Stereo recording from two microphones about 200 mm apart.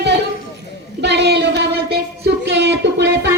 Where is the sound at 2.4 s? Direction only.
60° right (ahead or behind).